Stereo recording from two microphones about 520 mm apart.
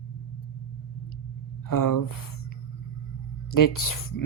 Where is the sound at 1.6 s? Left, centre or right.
Left.